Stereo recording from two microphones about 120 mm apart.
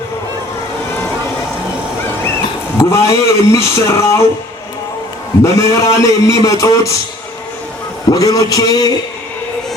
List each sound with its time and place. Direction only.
2.7 s a man's voice: 25° left (ahead or behind)
5.4 s a man's voice: 25° left (ahead or behind)
8.1 s speech: 30° left (ahead or behind)